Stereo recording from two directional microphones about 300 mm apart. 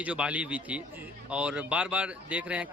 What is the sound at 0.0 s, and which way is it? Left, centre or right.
Speech, centre.